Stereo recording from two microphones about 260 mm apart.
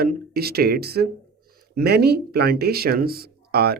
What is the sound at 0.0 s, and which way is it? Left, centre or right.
Speech, right.